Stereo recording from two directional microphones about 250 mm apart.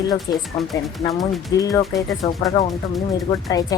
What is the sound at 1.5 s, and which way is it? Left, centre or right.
Speech, centre.